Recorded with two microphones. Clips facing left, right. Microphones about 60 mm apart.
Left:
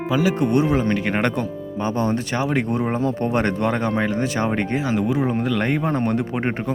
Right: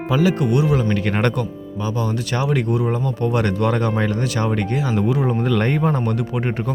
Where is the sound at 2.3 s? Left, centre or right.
Left.